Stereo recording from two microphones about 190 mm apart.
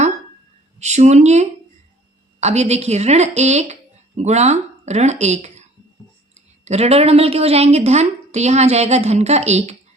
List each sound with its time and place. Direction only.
0.8 s a woman's voice: 35° right (ahead or behind)